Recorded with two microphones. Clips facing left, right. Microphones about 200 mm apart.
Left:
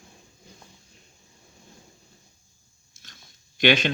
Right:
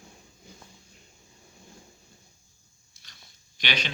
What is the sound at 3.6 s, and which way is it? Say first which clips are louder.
Speech: left 12 dB; 50° left (ahead or behind).